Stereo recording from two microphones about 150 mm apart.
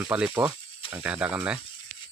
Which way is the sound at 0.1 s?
10° right (ahead or behind).